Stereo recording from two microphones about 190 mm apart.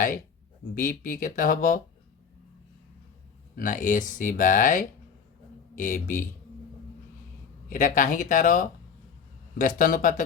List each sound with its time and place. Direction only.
0.8 s speech: 45° left (ahead or behind)
3.5 s speech: 45° left (ahead or behind)
7.7 s speech: 45° left (ahead or behind)